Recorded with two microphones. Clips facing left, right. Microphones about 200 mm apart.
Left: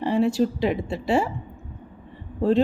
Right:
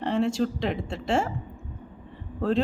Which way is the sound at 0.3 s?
5° left (ahead or behind).